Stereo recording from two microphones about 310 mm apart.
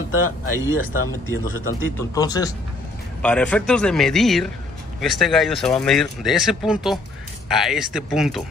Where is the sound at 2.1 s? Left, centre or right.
Centre.